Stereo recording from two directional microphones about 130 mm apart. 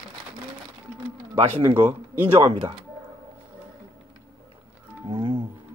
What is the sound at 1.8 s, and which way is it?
Speech, 15° right (ahead or behind).